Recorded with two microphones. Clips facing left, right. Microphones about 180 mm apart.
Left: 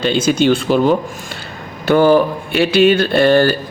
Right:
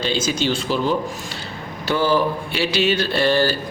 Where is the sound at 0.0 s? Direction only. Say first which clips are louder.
Left 8 dB; 60° left (ahead or behind).